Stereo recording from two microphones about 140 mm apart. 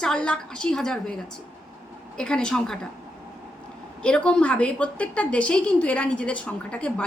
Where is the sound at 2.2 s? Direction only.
5° left (ahead or behind).